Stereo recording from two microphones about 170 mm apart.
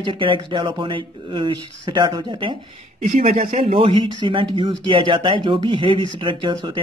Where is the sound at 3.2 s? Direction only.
45° right (ahead or behind).